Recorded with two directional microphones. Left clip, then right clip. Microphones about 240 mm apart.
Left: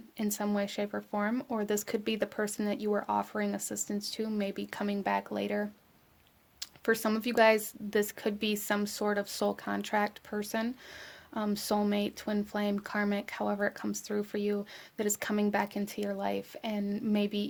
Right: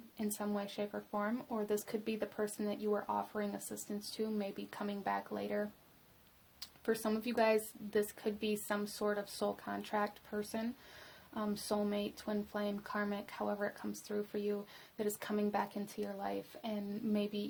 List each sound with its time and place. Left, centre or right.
0.2 s speech: left